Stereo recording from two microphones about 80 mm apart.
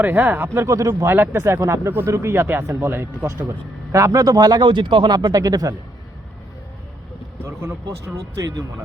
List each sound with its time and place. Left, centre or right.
0.0 s speech: right
1.0 s speech: right
3.9 s speech: right
8.0 s speech: right